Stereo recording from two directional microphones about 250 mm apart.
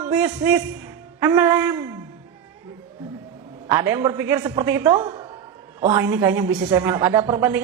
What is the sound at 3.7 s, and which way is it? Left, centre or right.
A woman's voice, centre.